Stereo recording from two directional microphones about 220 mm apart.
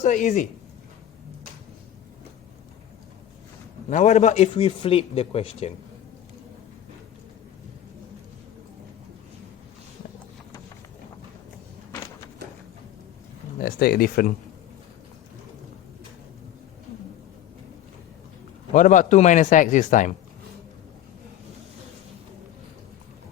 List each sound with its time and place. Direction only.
0.0 s speech: 35° left (ahead or behind)
3.8 s a man's voice: 35° left (ahead or behind)
13.6 s speech: 45° left (ahead or behind)
18.7 s speech: 35° left (ahead or behind)